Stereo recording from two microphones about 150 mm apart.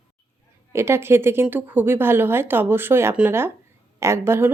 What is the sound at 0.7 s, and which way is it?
Speech, 15° right (ahead or behind).